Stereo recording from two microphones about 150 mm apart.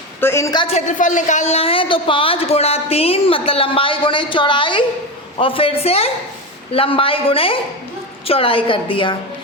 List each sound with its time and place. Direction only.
0.2 s a woman's voice: 15° left (ahead or behind)
0.7 s speech: 55° left (ahead or behind); by 9.1 s 35° left (ahead or behind)